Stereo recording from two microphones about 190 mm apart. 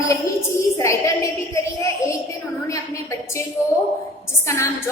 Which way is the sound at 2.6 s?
15° left (ahead or behind).